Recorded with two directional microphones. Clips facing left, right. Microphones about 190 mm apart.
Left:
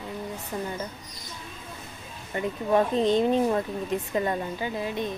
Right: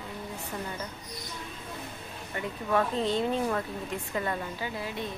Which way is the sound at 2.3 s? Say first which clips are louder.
Left 5 dB; 25° left (ahead or behind).